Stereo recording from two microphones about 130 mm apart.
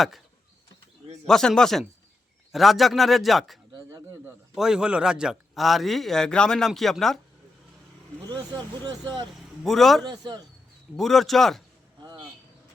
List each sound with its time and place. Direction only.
1.3 s a man's voice: 5° left (ahead or behind)
3.8 s bird: 20° right (ahead or behind)
4.5 s a man's voice: 5° right (ahead or behind)
8.8 s speech: 40° right (ahead or behind)
9.6 s a man's voice: centre (ahead or behind)
10.1 s speech: 35° right (ahead or behind)
10.9 s a man's voice: centre (ahead or behind)